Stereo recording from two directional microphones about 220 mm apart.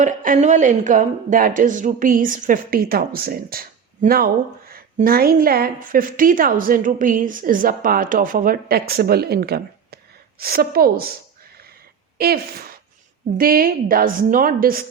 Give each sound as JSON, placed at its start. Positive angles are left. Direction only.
{"t": 0.0, "sound": "a woman's voice", "side_deg": -35}
{"t": 12.1, "sound": "a woman's voice", "side_deg": -45}